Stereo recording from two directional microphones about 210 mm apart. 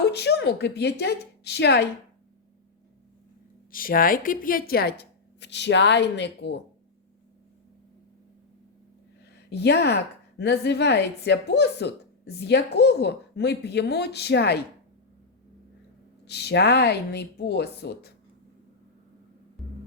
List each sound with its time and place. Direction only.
0.0 s a woman's voice: 55° left (ahead or behind)
3.7 s a woman's voice: 45° left (ahead or behind)
9.5 s a woman's voice: 55° left (ahead or behind)
16.2 s a woman's voice: 50° left (ahead or behind)